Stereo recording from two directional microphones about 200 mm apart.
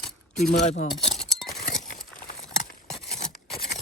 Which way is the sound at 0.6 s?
35° left (ahead or behind).